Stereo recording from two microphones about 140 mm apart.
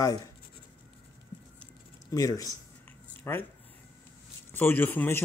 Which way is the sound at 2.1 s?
25° left (ahead or behind).